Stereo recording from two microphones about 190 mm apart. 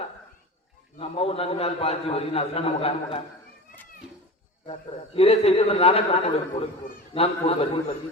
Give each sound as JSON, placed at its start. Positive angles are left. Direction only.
{"t": 0.9, "sound": "a man's voice", "side_deg": 30}
{"t": 4.6, "sound": "a man's voice", "side_deg": 30}